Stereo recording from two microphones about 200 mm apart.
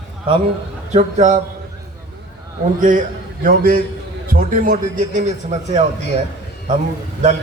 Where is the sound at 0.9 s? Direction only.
35° right (ahead or behind).